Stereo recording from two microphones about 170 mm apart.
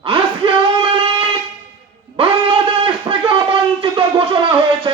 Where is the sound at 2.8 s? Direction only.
30° right (ahead or behind).